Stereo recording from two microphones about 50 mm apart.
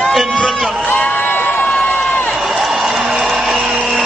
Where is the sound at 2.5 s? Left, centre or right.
Centre.